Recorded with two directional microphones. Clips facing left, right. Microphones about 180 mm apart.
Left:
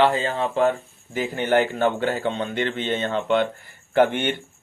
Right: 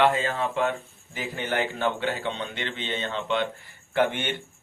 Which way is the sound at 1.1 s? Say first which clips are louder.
Left 8 dB; 50° left (ahead or behind).